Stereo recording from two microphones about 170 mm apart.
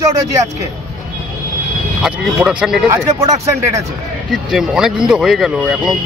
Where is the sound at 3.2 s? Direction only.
20° right (ahead or behind).